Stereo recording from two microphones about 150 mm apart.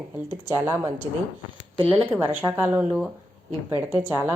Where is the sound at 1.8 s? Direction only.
35° right (ahead or behind).